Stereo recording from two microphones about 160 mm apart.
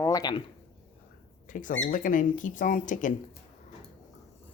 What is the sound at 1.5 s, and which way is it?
Speech, 55° left (ahead or behind).